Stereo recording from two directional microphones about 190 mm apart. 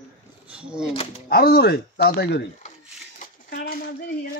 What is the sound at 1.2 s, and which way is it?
Speech, 55° left (ahead or behind).